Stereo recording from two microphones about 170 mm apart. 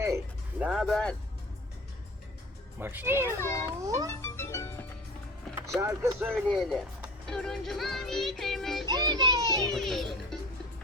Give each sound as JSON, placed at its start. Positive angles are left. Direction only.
{"t": 0.6, "sound": "music", "side_deg": 0}
{"t": 2.7, "sound": "speech", "side_deg": -10}
{"t": 3.2, "sound": "a child's voice", "side_deg": 15}
{"t": 3.8, "sound": "a child's voice", "side_deg": -20}
{"t": 4.2, "sound": "music", "side_deg": 15}
{"t": 5.8, "sound": "speech", "side_deg": -15}
{"t": 6.3, "sound": "music", "side_deg": 0}
{"t": 8.9, "sound": "a child's voice", "side_deg": -25}
{"t": 9.7, "sound": "music", "side_deg": 0}